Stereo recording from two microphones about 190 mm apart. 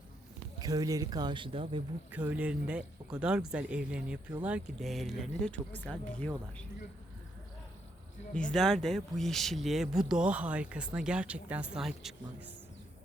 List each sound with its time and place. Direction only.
0.6 s speech: 20° right (ahead or behind)
2.0 s speech: 10° right (ahead or behind)
8.3 s speech: 5° left (ahead or behind)